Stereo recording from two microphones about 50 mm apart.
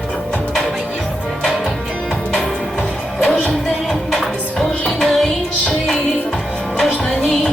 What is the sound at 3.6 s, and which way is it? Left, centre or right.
Music, centre.